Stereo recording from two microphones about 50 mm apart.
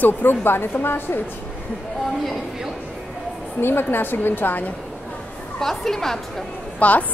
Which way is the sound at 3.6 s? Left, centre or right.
Left.